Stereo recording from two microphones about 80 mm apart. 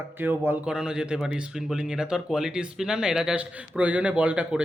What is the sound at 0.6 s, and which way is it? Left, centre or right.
Speech, centre.